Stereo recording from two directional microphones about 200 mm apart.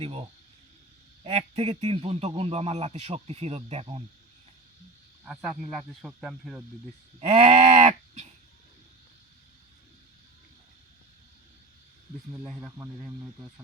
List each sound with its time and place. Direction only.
0.0 s a man's voice: 30° right (ahead or behind)
5.2 s speech: 5° right (ahead or behind)
7.2 s cattle: 30° right (ahead or behind)
12.3 s speech: 5° right (ahead or behind)